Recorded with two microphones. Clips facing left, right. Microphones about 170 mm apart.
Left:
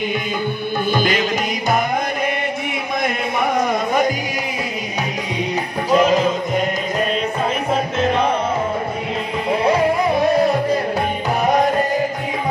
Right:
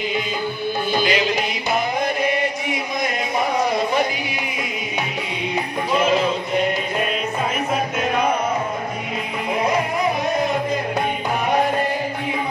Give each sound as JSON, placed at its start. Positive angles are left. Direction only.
{"t": 0.9, "sound": "music", "side_deg": 50}
{"t": 3.0, "sound": "a sound", "side_deg": 50}
{"t": 5.9, "sound": "music", "side_deg": 40}